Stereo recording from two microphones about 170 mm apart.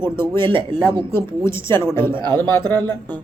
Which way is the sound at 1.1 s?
15° left (ahead or behind).